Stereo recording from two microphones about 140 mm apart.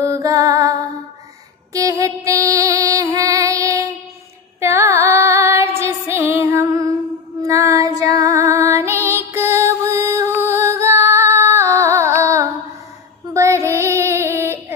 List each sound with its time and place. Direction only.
0.0 s music: 25° right (ahead or behind)
7.4 s child singing: 20° right (ahead or behind)
9.0 s music: 15° right (ahead or behind)
13.3 s child singing: 20° right (ahead or behind)